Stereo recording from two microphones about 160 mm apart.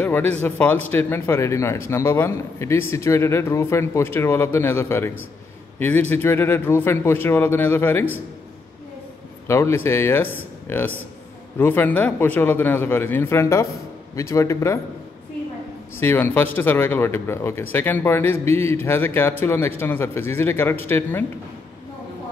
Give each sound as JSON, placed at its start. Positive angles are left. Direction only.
{"t": 0.0, "sound": "speech", "side_deg": 10}
{"t": 9.5, "sound": "speech", "side_deg": 15}
{"t": 16.0, "sound": "speech", "side_deg": 15}